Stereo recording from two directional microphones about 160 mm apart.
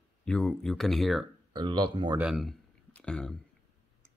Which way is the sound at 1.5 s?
30° right (ahead or behind).